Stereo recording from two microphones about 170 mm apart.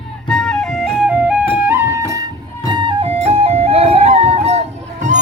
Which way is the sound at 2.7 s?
30° right (ahead or behind).